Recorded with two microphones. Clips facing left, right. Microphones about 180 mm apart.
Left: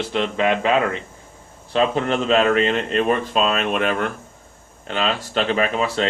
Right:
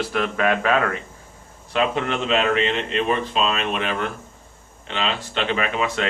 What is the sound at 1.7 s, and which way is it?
A man's voice, 30° left (ahead or behind).